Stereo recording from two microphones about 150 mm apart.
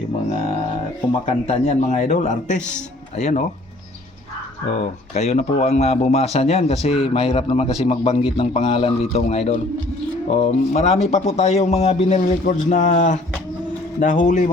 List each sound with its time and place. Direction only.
1.2 s a man's voice: 45° left (ahead or behind)
4.7 s a man's voice: 45° left (ahead or behind)